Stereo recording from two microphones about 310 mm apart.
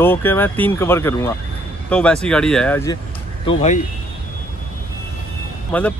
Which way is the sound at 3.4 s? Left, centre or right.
Left.